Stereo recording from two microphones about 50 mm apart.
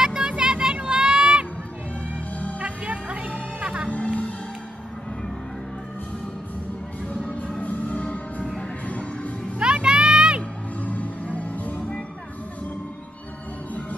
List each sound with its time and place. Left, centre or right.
0.0 s vehicle: centre
0.7 s a sound: centre
2.6 s music: right
3.9 s music: left
7.2 s music: centre
7.6 s music: left
9.6 s music: centre
10.8 s music: left